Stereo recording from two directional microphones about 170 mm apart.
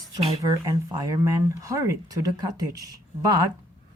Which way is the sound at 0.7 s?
20° right (ahead or behind).